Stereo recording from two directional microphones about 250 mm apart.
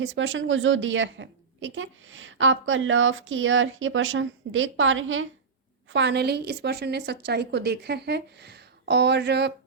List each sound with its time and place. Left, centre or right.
0.0 s a woman's voice: right